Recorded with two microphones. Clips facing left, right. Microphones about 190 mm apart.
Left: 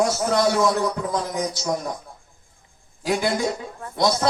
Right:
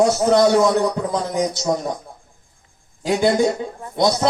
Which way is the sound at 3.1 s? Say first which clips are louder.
Right 6 dB; 25° right (ahead or behind).